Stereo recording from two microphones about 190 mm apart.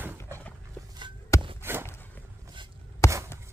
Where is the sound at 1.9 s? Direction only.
10° left (ahead or behind).